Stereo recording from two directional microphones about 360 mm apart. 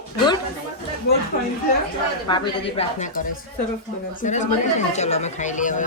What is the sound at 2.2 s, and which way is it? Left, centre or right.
Speech, centre.